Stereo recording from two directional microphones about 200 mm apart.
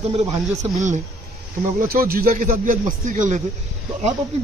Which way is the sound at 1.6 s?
45° right (ahead or behind).